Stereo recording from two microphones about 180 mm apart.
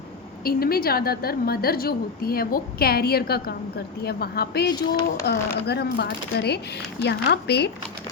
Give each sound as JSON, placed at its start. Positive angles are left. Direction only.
{"t": 0.4, "sound": "a woman's voice", "side_deg": 55}